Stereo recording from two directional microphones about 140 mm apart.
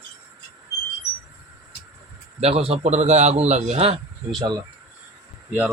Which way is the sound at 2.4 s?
45° right (ahead or behind).